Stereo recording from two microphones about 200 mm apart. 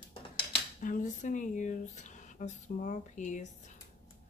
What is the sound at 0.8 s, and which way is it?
Speech, 40° left (ahead or behind).